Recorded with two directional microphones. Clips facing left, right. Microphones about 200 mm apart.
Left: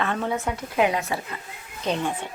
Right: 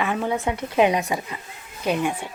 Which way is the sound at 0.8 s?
20° right (ahead or behind).